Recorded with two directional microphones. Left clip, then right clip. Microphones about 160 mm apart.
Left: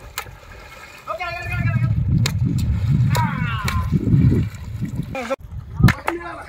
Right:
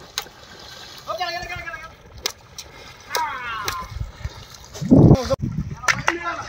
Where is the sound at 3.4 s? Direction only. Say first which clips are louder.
Left 1 dB; centre (ahead or behind).